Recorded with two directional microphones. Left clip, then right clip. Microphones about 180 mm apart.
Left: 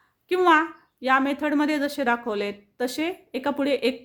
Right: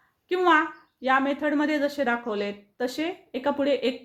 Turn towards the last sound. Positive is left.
turn(degrees=30)  # may be behind; listen again after turning